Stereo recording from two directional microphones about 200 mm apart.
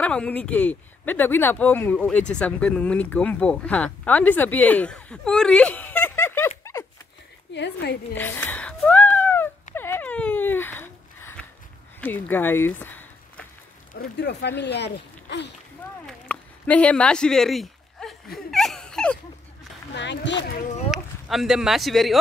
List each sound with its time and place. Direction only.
0.0 s speech: 5° left (ahead or behind)
7.5 s speech: 60° left (ahead or behind)
8.1 s a sound: 10° left (ahead or behind)
12.0 s speech: 10° left (ahead or behind)
14.1 s speech: 55° left (ahead or behind)
16.1 s a sound: 5° left (ahead or behind)
19.9 s speech: 60° left (ahead or behind)
20.9 s speech: centre (ahead or behind)